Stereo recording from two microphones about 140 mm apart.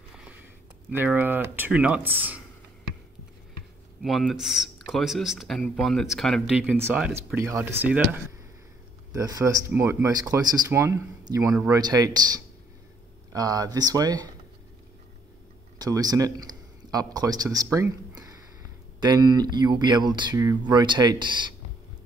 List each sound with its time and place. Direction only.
0.1 s a sound: 5° right (ahead or behind)
0.9 s speech: 10° right (ahead or behind)
4.0 s speech: centre (ahead or behind)
6.8 s speech: 15° right (ahead or behind)
9.1 s speech: 25° right (ahead or behind)
11.7 s speech: 25° right (ahead or behind)
15.8 s speech: 25° right (ahead or behind)